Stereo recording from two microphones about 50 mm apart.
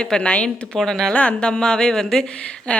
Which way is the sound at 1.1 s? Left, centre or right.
Left.